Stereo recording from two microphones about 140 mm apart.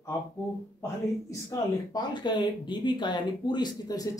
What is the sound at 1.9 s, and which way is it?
Speech, 30° left (ahead or behind).